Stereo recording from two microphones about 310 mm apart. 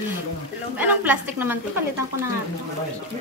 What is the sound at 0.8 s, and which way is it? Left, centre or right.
Speech, centre.